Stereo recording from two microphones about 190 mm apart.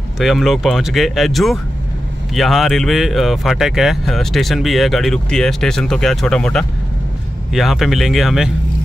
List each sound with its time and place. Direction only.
0.2 s speech: centre (ahead or behind)